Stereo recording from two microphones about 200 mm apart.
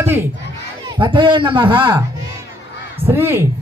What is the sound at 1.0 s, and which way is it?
A man's voice, 25° right (ahead or behind).